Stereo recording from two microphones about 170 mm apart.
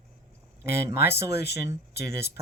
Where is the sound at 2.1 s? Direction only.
70° left (ahead or behind).